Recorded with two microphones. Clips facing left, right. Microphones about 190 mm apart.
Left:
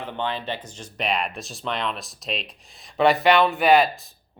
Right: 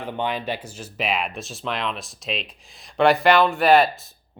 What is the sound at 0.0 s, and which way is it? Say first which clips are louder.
Speech: right 2 dB; 15° right (ahead or behind).